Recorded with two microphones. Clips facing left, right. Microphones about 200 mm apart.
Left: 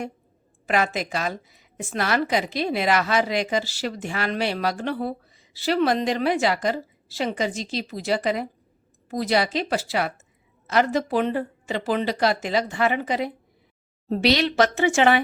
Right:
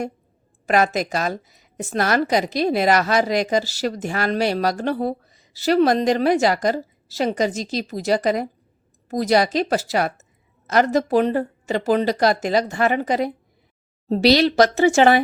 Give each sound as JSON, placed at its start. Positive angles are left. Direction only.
{"t": 0.7, "sound": "a woman's voice", "side_deg": -40}